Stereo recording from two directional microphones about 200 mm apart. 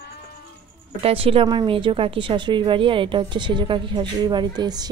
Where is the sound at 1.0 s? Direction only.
30° right (ahead or behind).